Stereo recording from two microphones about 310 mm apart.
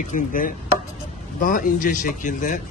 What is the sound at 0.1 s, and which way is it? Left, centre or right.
A man's voice, left.